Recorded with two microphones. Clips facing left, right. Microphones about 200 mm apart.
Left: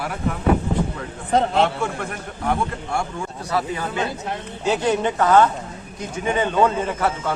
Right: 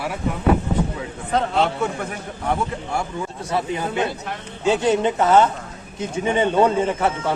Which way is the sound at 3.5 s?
20° right (ahead or behind).